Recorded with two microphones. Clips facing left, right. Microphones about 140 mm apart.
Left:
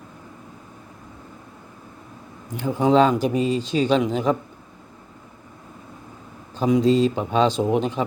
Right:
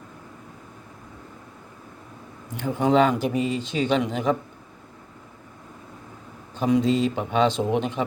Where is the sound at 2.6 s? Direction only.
10° left (ahead or behind).